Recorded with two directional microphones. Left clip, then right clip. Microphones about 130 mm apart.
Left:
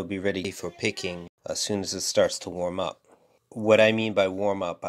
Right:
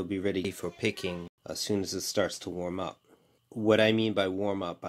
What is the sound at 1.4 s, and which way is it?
Speech, 30° left (ahead or behind).